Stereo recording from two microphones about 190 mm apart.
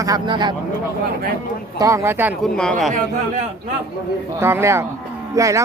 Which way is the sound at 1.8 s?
15° right (ahead or behind).